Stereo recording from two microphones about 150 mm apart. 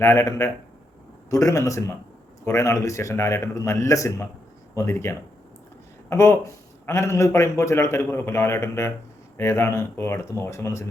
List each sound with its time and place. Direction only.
0.0 s a man's voice: 20° left (ahead or behind)